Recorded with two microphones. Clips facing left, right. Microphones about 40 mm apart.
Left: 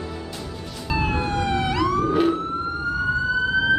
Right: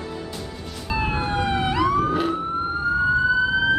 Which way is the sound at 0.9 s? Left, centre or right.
Centre.